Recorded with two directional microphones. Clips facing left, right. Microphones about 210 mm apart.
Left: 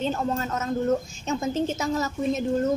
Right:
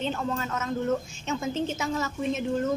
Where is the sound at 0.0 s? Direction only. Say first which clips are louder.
Left 3 dB; 40° left (ahead or behind).